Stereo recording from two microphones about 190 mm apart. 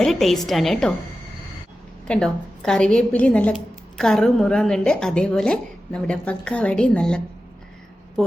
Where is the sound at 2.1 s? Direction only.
5° left (ahead or behind).